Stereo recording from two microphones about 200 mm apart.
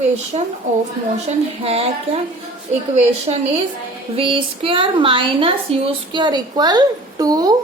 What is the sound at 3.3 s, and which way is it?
A woman's voice, 30° right (ahead or behind).